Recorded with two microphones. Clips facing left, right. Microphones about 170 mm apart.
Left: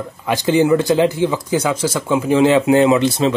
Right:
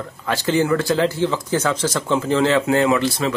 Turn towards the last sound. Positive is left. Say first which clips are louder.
# left 5 dB
turn(degrees=20)  # may be behind; listen again after turning